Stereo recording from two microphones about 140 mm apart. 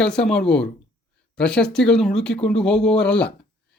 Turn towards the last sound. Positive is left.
turn(degrees=5)  # may be behind; listen again after turning